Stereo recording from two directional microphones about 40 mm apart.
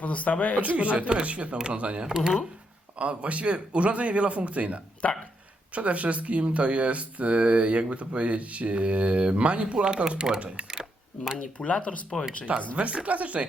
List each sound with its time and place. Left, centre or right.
0.0 s speech: left
0.6 s speech: right
2.0 s speech: centre
3.0 s speech: right
5.0 s speech: left
5.7 s speech: right; by 10.4 s centre
11.3 s speech: left
12.1 s speech: centre
12.7 s speech: right